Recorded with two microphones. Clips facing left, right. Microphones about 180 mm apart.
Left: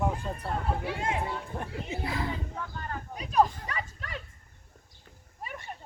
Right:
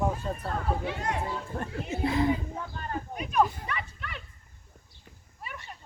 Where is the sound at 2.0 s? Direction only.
20° right (ahead or behind).